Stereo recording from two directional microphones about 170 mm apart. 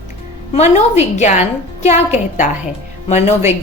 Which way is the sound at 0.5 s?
40° left (ahead or behind).